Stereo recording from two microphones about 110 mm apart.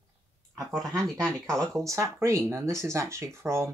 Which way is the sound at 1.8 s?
25° right (ahead or behind).